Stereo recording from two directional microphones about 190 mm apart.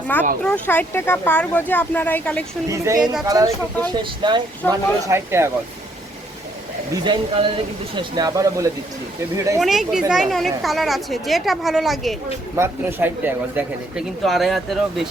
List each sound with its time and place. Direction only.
0.1 s speech: 10° left (ahead or behind)
2.6 s speech: 15° right (ahead or behind)
6.9 s speech: 25° right (ahead or behind)
9.6 s speech: centre (ahead or behind)
12.5 s speech: 10° right (ahead or behind)